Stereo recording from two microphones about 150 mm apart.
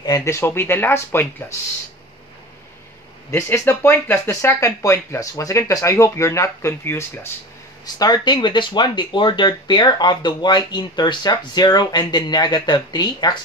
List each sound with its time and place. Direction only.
0.0 s speech: 20° left (ahead or behind)
3.3 s speech: 15° left (ahead or behind)